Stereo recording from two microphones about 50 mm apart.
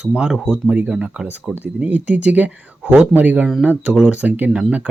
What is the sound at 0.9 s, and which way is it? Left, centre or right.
Speech, centre.